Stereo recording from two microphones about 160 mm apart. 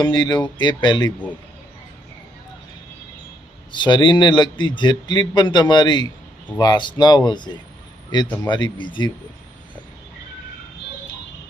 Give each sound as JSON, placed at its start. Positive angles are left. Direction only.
{"t": 0.0, "sound": "a man's voice", "side_deg": 25}
{"t": 3.7, "sound": "a man's voice", "side_deg": 30}